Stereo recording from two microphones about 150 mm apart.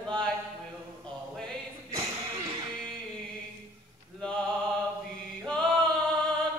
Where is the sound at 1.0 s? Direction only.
5° left (ahead or behind).